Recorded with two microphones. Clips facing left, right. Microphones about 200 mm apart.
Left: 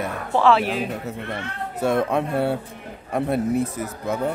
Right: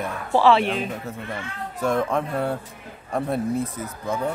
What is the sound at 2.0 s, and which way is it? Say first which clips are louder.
Speech: left 2 dB; 25° left (ahead or behind).